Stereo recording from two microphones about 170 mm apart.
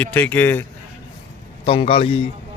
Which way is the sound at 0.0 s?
10° left (ahead or behind).